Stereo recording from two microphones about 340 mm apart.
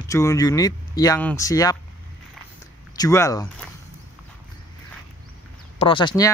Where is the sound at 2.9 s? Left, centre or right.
Centre.